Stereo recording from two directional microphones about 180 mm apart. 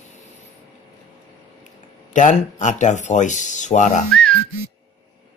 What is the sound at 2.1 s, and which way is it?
Speech, 45° left (ahead or behind).